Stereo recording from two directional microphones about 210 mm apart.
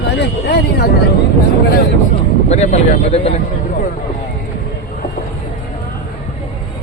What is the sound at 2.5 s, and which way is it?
Speech, 35° left (ahead or behind).